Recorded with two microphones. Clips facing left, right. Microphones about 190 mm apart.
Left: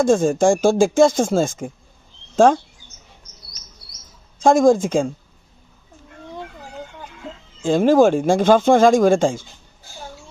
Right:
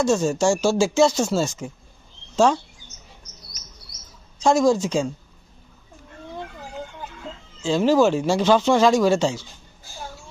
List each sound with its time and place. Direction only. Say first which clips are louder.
0.0 s speech: left 4 dB; 50° left (ahead or behind)
4.4 s speech: left 4 dB; 50° left (ahead or behind)
7.6 s speech: left 4 dB; 50° left (ahead or behind)